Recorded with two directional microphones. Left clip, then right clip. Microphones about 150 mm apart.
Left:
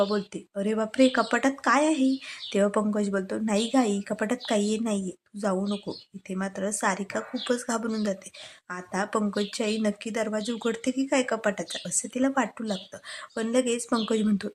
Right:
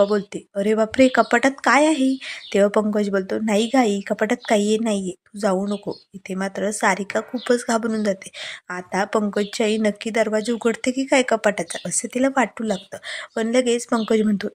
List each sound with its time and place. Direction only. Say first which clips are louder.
0.0 s speech: right 7 dB; 25° right (ahead or behind)